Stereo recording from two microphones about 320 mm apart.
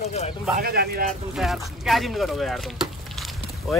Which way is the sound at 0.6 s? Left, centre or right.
Right.